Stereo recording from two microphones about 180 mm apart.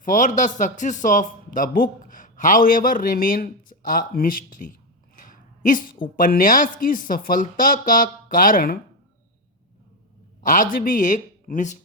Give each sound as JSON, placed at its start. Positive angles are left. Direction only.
{"t": 0.0, "sound": "a man's voice", "side_deg": 45}
{"t": 5.2, "sound": "a sound", "side_deg": 50}
{"t": 6.1, "sound": "a man's voice", "side_deg": 50}
{"t": 10.4, "sound": "a man's voice", "side_deg": 45}